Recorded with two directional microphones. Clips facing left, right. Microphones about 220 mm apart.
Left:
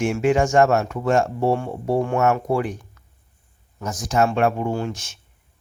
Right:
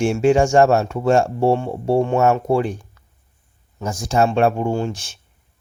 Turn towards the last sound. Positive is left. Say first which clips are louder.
# right 3 dB
turn(degrees=-30)  # may be behind; listen again after turning